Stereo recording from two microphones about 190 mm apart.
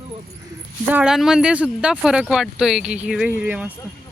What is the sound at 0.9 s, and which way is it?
Speech, 5° right (ahead or behind).